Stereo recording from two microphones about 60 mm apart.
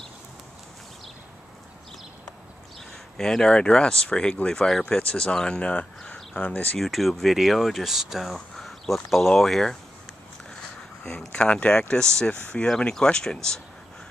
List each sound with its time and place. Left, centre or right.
2.9 s speech: centre; by 6.8 s left
6.8 s speech: centre
11.1 s speech: centre